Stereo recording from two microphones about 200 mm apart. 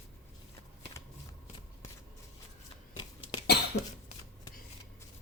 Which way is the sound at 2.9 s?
25° left (ahead or behind).